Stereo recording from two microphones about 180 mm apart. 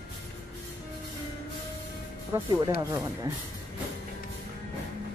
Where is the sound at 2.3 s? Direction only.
20° right (ahead or behind).